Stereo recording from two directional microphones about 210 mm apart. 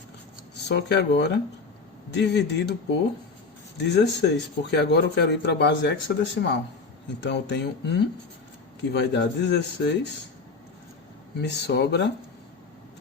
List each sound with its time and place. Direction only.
0.7 s speech: 55° left (ahead or behind)
3.8 s speech: 55° left (ahead or behind)
11.3 s speech: 55° left (ahead or behind)